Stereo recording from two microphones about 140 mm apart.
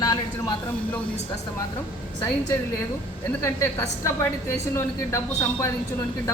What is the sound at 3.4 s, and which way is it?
A woman's voice, 15° left (ahead or behind).